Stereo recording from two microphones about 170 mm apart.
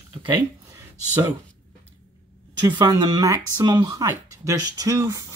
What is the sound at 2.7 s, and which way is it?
Speech, 25° right (ahead or behind).